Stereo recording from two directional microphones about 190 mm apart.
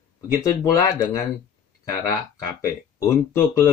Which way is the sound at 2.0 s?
20° left (ahead or behind).